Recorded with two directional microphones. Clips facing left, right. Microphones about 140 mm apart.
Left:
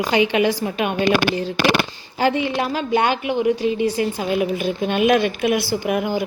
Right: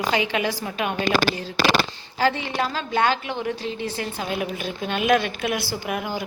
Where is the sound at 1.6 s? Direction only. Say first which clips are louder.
Left 1 dB; 55° left (ahead or behind).